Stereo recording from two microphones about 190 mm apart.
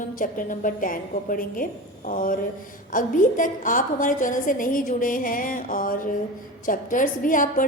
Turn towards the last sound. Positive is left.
turn(degrees=45)  # may be behind; listen again after turning